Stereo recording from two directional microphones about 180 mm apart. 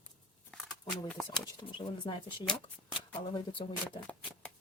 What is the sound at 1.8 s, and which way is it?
Speech, 25° left (ahead or behind).